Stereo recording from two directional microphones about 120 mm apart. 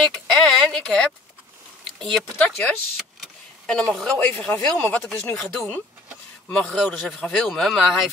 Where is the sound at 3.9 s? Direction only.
10° left (ahead or behind).